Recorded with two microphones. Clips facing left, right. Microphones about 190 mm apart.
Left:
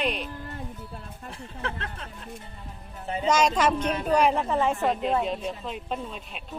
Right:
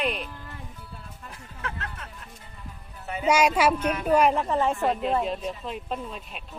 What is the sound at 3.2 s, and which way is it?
Speech, 10° right (ahead or behind).